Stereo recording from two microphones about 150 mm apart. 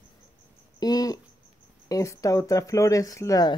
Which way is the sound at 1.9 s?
20° left (ahead or behind).